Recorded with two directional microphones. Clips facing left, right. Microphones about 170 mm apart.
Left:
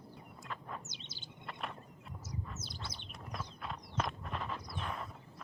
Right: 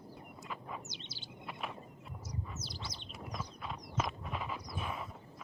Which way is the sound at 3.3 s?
Centre (ahead or behind).